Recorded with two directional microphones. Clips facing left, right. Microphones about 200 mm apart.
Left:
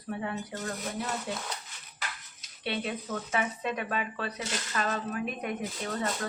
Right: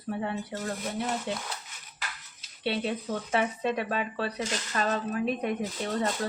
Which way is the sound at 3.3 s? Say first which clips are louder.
Right 4 dB; 30° right (ahead or behind).